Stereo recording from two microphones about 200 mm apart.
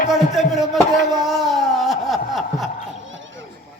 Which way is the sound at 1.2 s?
Centre (ahead or behind).